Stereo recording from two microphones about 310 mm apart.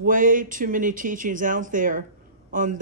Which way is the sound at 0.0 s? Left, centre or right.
Right.